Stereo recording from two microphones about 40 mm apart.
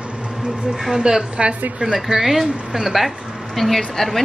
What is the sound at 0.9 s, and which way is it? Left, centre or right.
A woman's voice, centre.